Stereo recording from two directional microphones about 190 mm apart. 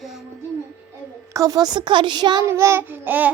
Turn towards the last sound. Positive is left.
turn(degrees=-10)  # may be behind; listen again after turning